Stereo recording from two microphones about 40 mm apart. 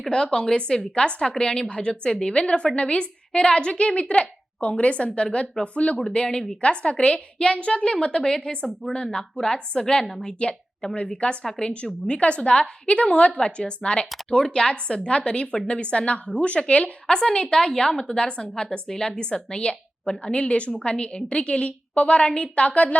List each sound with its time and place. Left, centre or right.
0.1 s a woman's voice: left
6.0 s a woman's voice: centre
10.4 s a woman's voice: left
11.4 s speech: centre
12.0 s a woman's voice: left